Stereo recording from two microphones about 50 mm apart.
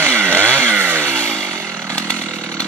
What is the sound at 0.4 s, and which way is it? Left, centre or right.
Chainsaw, right.